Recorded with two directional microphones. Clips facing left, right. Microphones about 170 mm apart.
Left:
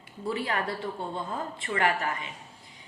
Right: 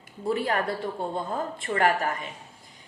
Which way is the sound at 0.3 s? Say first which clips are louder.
Right 4 dB; 45° right (ahead or behind).